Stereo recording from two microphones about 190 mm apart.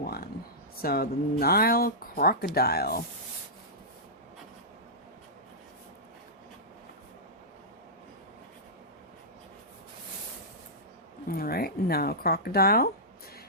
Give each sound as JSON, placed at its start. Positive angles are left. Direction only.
{"t": 0.8, "sound": "speech", "side_deg": 50}
{"t": 11.3, "sound": "speech", "side_deg": 50}